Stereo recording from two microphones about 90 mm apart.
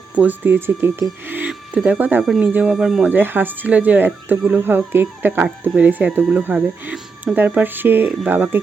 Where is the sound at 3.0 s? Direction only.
25° right (ahead or behind).